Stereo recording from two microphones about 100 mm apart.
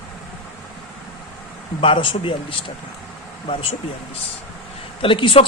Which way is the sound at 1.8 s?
60° left (ahead or behind).